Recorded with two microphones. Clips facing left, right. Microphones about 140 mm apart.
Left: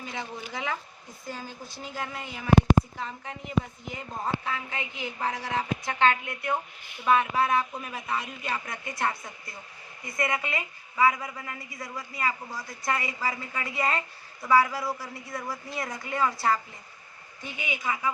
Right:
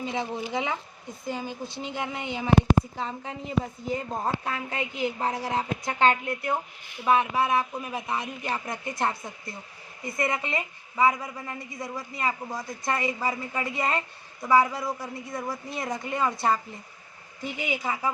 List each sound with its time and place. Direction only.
0.0 s a woman's voice: 25° right (ahead or behind)
7.0 s speech: 15° right (ahead or behind)
8.0 s a woman's voice: 20° right (ahead or behind)
17.7 s a woman's voice: 35° right (ahead or behind)